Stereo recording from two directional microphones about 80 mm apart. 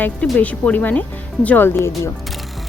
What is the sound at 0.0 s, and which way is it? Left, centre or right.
Speech, centre.